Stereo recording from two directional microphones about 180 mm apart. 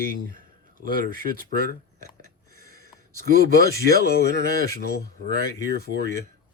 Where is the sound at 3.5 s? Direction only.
60° right (ahead or behind).